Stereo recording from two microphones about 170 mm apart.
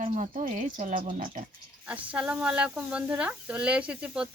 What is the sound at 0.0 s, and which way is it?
Speech, 45° right (ahead or behind).